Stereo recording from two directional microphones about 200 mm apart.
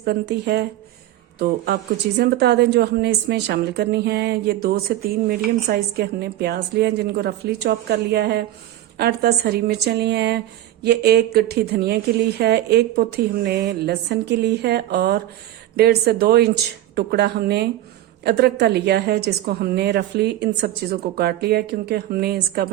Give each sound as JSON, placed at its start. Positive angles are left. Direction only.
{"t": 0.0, "sound": "a woman's voice", "side_deg": -50}